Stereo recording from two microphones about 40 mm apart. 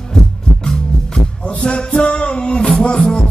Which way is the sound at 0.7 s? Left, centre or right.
Left.